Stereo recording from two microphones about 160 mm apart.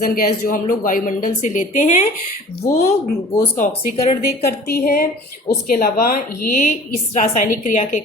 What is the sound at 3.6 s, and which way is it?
Speech, 55° left (ahead or behind).